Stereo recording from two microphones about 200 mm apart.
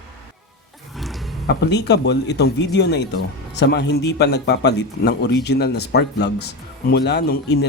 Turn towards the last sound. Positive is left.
turn(degrees=55)  # may be behind; listen again after turning